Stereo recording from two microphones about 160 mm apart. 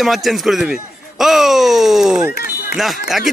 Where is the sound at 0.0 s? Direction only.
Centre (ahead or behind).